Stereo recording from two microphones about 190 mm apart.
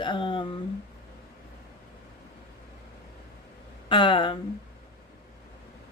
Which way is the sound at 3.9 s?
25° left (ahead or behind).